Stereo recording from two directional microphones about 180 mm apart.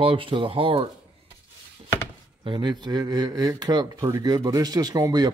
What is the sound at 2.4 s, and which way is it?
Speech, 25° right (ahead or behind).